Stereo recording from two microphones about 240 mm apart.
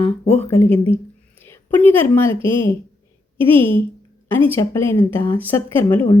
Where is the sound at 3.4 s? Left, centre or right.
Right.